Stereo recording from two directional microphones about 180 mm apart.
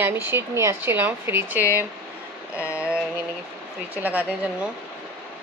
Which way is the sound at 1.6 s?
15° left (ahead or behind).